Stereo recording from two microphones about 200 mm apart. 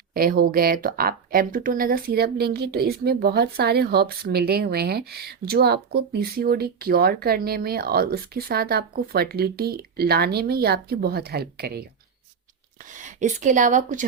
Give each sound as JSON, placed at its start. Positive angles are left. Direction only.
{"t": 0.1, "sound": "speech", "side_deg": -50}
{"t": 13.0, "sound": "a woman's voice", "side_deg": -40}